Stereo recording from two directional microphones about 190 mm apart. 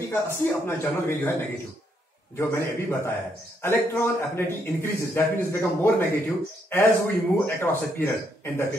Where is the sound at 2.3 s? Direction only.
15° left (ahead or behind).